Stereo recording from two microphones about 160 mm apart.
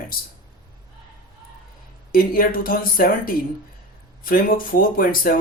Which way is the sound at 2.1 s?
65° left (ahead or behind).